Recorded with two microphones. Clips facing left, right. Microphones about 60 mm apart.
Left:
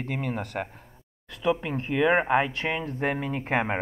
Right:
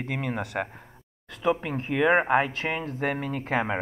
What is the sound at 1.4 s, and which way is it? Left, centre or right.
Speech, centre.